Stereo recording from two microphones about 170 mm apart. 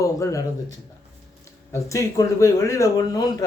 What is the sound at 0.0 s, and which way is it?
Speech, 20° left (ahead or behind).